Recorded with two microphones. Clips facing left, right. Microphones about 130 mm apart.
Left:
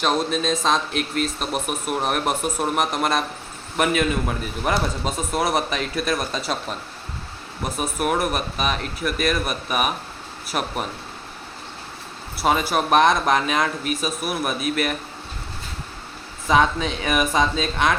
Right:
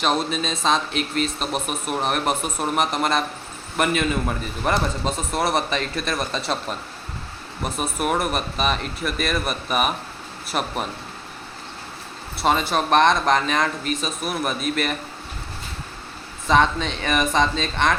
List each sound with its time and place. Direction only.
0.0 s speech: centre (ahead or behind)
12.4 s speech: 5° left (ahead or behind)
16.5 s speech: 5° left (ahead or behind)